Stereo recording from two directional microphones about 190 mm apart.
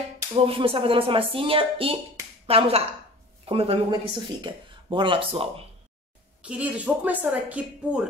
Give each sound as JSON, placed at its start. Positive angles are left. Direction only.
{"t": 0.5, "sound": "speech", "side_deg": -30}
{"t": 6.4, "sound": "a woman's voice", "side_deg": -5}